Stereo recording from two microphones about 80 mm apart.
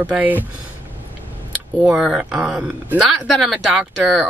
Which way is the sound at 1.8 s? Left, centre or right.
Centre.